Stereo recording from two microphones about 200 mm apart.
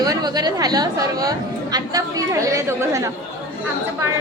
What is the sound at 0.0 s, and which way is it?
A woman's voice, 20° right (ahead or behind).